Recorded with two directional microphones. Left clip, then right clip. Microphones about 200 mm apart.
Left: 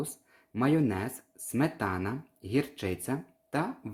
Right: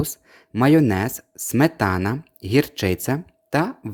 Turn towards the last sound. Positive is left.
turn(degrees=-45)  # may be behind; listen again after turning